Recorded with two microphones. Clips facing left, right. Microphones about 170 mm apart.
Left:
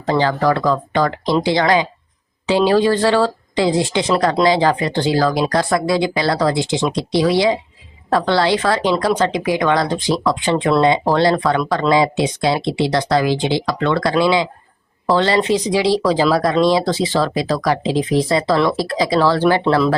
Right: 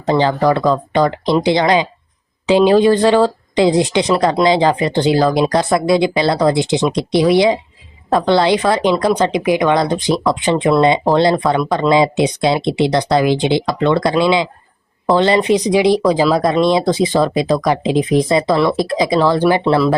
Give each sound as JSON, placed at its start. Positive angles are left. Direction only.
{"t": 0.0, "sound": "speech", "side_deg": -20}